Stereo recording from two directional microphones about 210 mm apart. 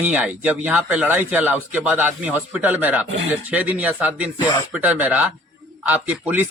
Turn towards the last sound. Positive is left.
turn(degrees=-10)  # may be behind; listen again after turning